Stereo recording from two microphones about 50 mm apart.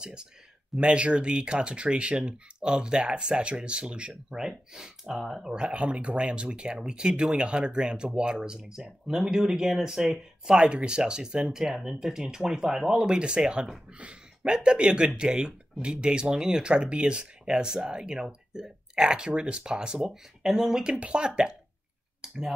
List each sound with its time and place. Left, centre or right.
0.0 s speech: centre
4.1 s speech: centre
20.0 s speech: centre
22.2 s a sound: centre